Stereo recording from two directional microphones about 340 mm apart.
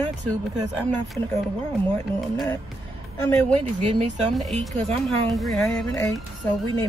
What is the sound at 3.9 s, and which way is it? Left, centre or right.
Speech, centre.